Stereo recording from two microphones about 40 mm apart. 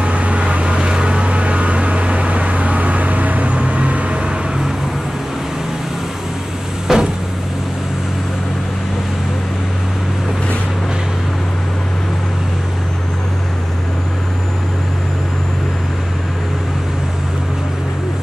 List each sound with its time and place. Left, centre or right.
0.0 s vehicle: right
6.9 s vehicle: centre